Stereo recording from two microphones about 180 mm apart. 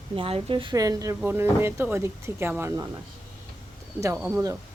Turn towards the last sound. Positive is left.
turn(degrees=-5)  # may be behind; listen again after turning